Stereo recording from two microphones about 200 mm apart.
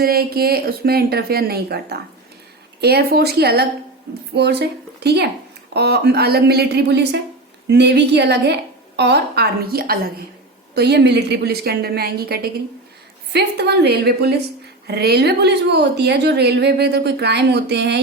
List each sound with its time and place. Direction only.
0.0 s a woman's voice: 50° right (ahead or behind)